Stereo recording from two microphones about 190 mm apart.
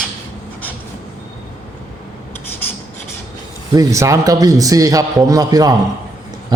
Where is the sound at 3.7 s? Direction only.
20° right (ahead or behind).